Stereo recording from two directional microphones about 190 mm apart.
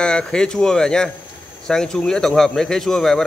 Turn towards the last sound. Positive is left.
turn(degrees=0)  # may be behind; listen again after turning